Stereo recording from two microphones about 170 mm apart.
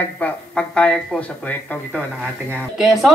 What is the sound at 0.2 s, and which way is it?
Speech, 5° left (ahead or behind).